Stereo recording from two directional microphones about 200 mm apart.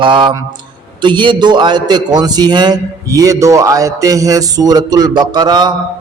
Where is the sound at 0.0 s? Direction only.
25° right (ahead or behind).